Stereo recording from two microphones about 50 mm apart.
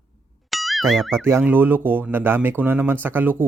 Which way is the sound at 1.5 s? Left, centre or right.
Right.